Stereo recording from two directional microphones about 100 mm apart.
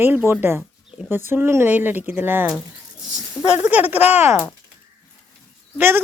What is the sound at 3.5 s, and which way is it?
Speech, 15° right (ahead or behind).